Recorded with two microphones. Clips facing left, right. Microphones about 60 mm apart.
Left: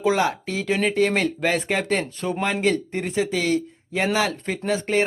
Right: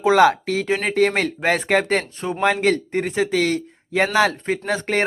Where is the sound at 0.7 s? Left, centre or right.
Right.